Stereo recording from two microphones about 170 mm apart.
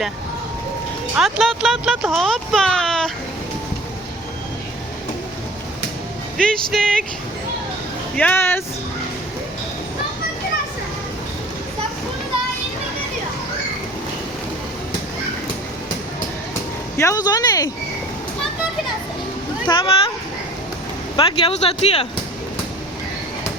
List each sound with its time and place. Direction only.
1.1 s speech: centre (ahead or behind)
6.3 s speech: 5° left (ahead or behind)
8.1 s speech: 10° left (ahead or behind)
17.0 s speech: 20° left (ahead or behind)
19.6 s speech: 25° left (ahead or behind)
21.2 s speech: 30° left (ahead or behind)